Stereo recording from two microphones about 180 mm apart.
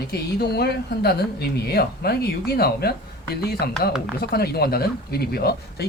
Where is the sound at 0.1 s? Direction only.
60° left (ahead or behind).